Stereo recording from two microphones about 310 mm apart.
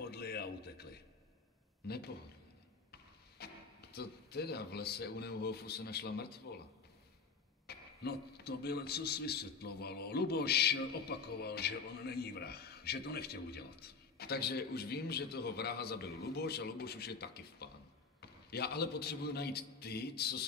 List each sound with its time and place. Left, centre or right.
0.0 s a sound: left
1.9 s a man's voice: left
3.4 s music: left
3.9 s a man's voice: left
7.6 s a man's voice: left